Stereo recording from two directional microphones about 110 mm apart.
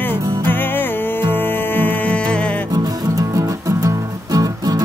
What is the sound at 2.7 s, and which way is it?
Music, 30° right (ahead or behind).